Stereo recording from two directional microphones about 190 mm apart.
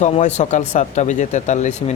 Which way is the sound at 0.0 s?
40° left (ahead or behind).